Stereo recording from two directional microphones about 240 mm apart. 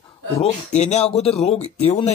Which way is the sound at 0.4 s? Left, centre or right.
Left.